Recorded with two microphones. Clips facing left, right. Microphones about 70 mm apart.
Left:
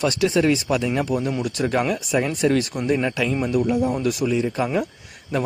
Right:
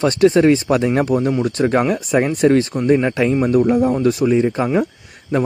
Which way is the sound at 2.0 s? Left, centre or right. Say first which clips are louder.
Right 5 dB; right.